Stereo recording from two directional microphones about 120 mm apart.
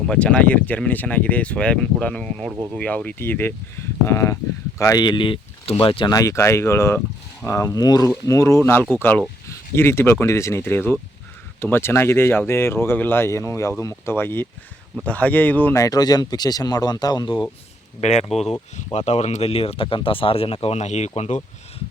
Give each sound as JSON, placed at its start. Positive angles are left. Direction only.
{"t": 0.1, "sound": "speech", "side_deg": 10}
{"t": 6.1, "sound": "speech", "side_deg": 25}
{"t": 15.8, "sound": "speech", "side_deg": 30}
{"t": 18.0, "sound": "speech", "side_deg": 65}